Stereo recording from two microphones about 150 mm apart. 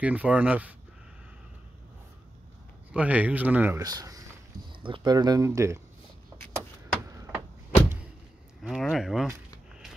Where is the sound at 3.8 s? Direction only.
25° right (ahead or behind).